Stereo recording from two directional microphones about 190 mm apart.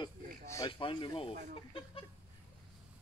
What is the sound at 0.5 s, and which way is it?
Speech, 20° left (ahead or behind).